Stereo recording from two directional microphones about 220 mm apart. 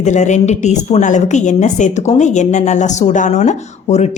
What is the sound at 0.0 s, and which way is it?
A woman's voice, 30° left (ahead or behind).